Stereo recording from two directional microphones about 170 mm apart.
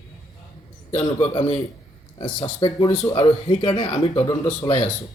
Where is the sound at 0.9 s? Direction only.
35° left (ahead or behind).